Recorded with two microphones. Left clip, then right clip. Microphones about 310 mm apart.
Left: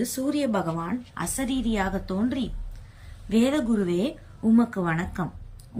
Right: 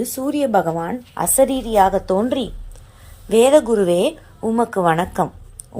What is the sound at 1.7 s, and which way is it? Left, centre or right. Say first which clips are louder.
Speech: right 14 dB; right.